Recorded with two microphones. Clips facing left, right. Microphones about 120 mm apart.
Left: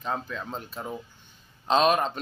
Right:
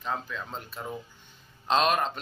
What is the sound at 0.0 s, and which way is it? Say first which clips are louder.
Speech: left 2 dB; 15° left (ahead or behind).